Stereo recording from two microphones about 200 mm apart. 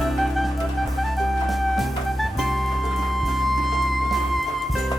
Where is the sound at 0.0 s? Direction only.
Centre (ahead or behind).